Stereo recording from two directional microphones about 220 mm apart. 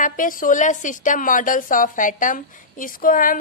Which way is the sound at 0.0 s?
40° left (ahead or behind).